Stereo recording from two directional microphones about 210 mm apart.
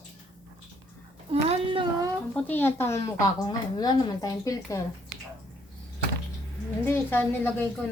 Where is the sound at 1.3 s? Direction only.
25° right (ahead or behind).